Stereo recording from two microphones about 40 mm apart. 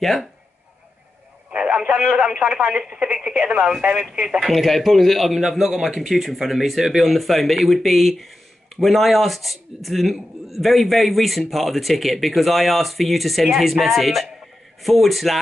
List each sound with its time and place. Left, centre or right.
0.0 s a man's voice: centre
1.5 s a sound: right
1.9 s speech: right
3.2 s speech: right
4.4 s a man's voice: centre